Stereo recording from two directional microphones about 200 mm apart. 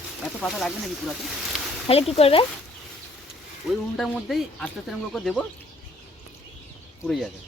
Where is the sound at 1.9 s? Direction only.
30° left (ahead or behind).